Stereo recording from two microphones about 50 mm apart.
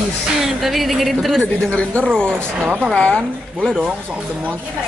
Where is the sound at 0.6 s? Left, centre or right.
Centre.